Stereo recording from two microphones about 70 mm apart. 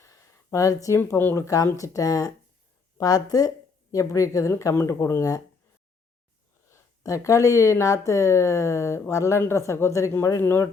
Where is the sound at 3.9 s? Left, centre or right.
Left.